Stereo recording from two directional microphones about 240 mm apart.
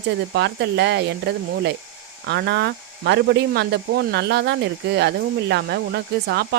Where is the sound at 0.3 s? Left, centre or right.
Right.